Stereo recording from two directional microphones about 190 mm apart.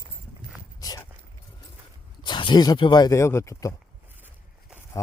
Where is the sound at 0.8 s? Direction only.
20° left (ahead or behind).